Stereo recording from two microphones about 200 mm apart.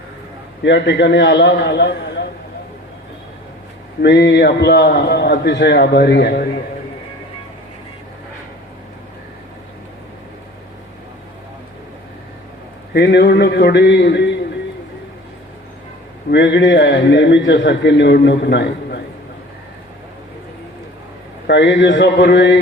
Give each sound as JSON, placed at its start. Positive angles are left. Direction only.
{"t": 0.6, "sound": "a man's voice", "side_deg": 60}
{"t": 4.0, "sound": "a man's voice", "side_deg": 60}
{"t": 12.9, "sound": "a man's voice", "side_deg": 55}
{"t": 16.3, "sound": "a man's voice", "side_deg": 60}
{"t": 21.4, "sound": "a man's voice", "side_deg": 60}